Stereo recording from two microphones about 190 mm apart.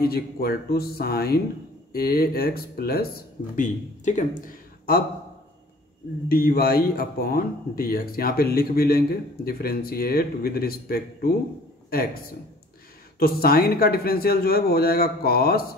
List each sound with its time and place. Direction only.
0.0 s speech: 55° left (ahead or behind)
3.5 s speech: 40° left (ahead or behind)
6.2 s speech: 55° left (ahead or behind)
13.2 s speech: 50° left (ahead or behind)